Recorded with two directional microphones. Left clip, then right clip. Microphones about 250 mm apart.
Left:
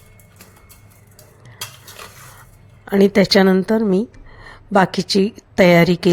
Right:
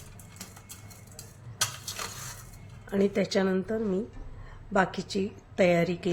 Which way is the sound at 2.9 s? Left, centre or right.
Left.